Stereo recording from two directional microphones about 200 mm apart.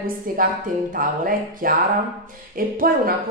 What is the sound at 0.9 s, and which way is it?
A woman's voice, 45° right (ahead or behind).